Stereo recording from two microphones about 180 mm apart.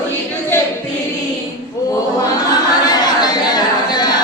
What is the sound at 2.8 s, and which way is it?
Chatter, 20° left (ahead or behind).